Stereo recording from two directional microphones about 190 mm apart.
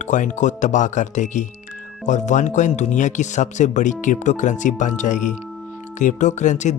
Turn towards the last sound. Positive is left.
turn(degrees=40)  # may be behind; listen again after turning